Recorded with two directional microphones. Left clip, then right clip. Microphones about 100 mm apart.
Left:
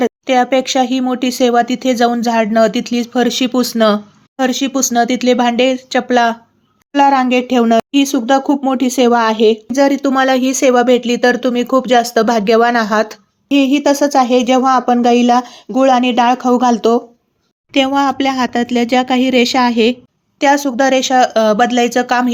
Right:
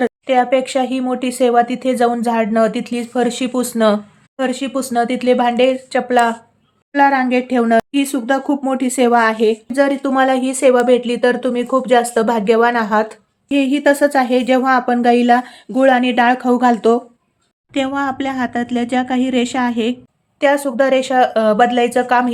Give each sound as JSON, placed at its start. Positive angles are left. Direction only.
{"t": 0.0, "sound": "a woman's voice", "side_deg": 30}
{"t": 17.7, "sound": "speech", "side_deg": 35}
{"t": 20.4, "sound": "a woman's voice", "side_deg": 25}